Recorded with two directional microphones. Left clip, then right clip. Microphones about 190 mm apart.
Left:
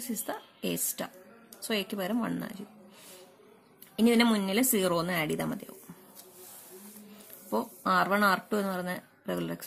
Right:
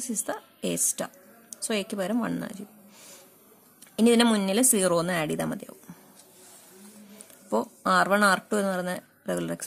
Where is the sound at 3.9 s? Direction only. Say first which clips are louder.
Right 4 dB; 25° right (ahead or behind).